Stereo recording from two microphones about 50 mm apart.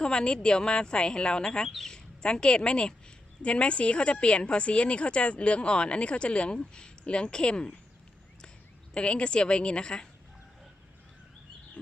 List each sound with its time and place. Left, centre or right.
0.0 s a woman's voice: centre
1.6 s speech: centre
2.2 s a woman's voice: centre
8.9 s a woman's voice: left